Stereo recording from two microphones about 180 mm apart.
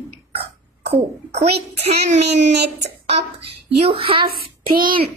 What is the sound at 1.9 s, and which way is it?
Speech, 40° right (ahead or behind).